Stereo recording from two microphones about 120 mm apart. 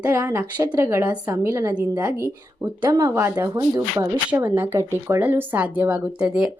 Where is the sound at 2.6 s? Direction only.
30° right (ahead or behind).